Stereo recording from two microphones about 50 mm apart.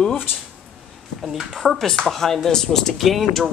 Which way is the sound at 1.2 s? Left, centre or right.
Centre.